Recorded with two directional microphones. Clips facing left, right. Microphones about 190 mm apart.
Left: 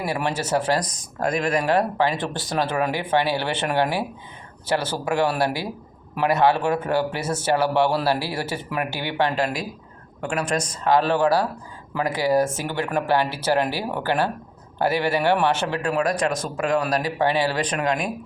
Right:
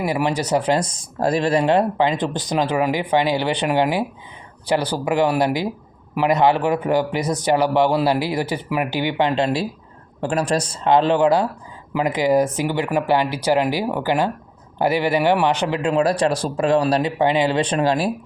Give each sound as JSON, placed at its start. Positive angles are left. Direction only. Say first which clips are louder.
{"t": 0.0, "sound": "a man's voice", "louder": "right 4 dB", "side_deg": -15}
{"t": 17.2, "sound": "a man's voice", "louder": "right 4 dB", "side_deg": -20}